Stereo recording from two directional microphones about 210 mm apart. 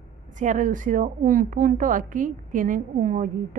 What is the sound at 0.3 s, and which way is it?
A woman's voice, 35° right (ahead or behind).